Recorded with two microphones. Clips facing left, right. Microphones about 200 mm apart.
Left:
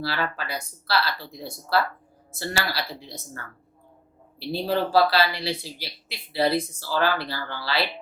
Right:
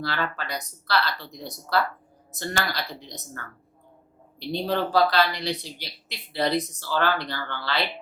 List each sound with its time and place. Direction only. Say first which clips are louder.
0.0 s speech: left 1 dB; 5° left (ahead or behind)